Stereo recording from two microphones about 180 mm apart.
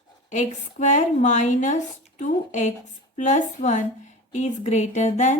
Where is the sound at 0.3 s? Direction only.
40° left (ahead or behind).